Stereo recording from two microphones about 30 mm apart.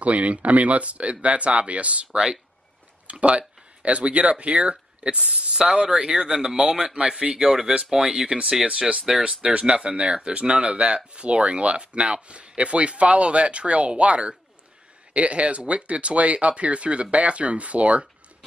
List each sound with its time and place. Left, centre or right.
0.0 s speech: right
3.1 s speech: right
5.1 s speech: right
6.8 s speech: right
7.9 s speech: centre
8.6 s speech: right